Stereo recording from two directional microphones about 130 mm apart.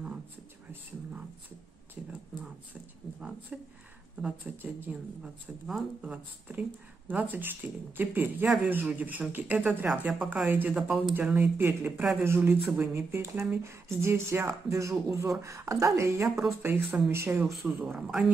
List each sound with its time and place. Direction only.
2.0 s speech: 10° right (ahead or behind)
4.2 s speech: 15° right (ahead or behind)
11.1 s speech: 15° right (ahead or behind)
17.5 s speech: centre (ahead or behind)
17.7 s speech: 15° right (ahead or behind)